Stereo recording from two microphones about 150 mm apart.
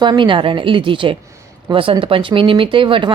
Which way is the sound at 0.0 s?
30° right (ahead or behind).